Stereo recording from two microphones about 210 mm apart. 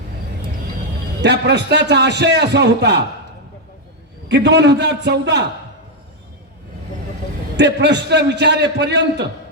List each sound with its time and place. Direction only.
1.2 s a man's voice: 55° right (ahead or behind)
4.3 s a man's voice: 55° right (ahead or behind)
7.5 s a man's voice: 55° right (ahead or behind)